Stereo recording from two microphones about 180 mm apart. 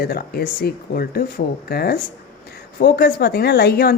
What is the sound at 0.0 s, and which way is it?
Speech, 60° left (ahead or behind).